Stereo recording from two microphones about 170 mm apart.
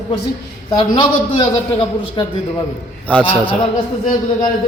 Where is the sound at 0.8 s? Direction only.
25° left (ahead or behind).